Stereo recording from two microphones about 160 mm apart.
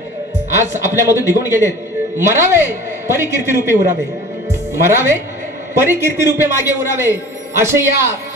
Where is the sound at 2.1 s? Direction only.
15° right (ahead or behind).